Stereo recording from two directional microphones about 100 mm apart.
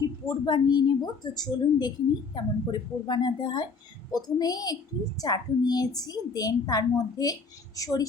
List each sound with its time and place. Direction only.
0.3 s a woman's voice: 45° left (ahead or behind)